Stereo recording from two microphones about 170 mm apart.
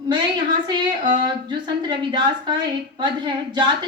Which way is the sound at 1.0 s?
30° right (ahead or behind).